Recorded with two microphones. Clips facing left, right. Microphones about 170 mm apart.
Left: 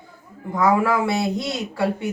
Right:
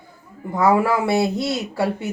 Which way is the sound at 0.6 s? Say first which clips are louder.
Right 1 dB; 30° right (ahead or behind).